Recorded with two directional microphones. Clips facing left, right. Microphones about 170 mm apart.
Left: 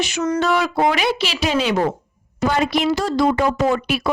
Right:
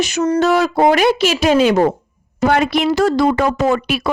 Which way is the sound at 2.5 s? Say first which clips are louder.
Right 3 dB; 60° right (ahead or behind).